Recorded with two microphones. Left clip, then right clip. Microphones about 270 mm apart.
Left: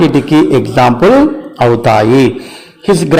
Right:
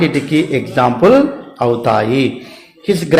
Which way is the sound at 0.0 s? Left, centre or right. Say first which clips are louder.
Left 6 dB; left.